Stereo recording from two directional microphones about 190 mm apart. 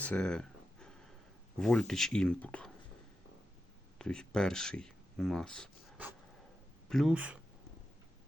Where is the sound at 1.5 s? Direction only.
5° left (ahead or behind).